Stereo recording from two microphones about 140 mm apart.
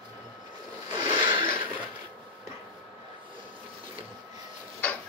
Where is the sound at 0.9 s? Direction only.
35° right (ahead or behind).